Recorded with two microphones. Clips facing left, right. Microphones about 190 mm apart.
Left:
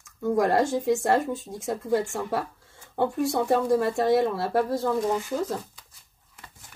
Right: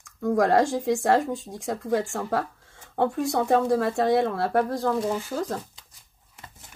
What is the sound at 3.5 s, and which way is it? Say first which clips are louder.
Speech: right 1 dB; 5° left (ahead or behind).